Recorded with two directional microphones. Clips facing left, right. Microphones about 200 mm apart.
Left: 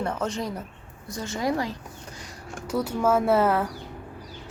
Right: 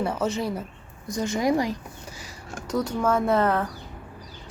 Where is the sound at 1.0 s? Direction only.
15° right (ahead or behind).